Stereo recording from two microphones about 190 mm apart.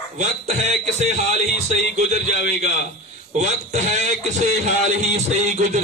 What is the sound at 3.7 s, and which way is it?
Speech, 35° right (ahead or behind).